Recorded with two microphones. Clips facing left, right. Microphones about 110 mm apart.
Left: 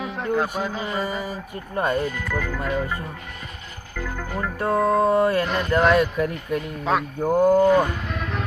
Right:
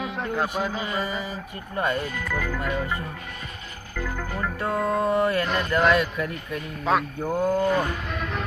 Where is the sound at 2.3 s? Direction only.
5° right (ahead or behind).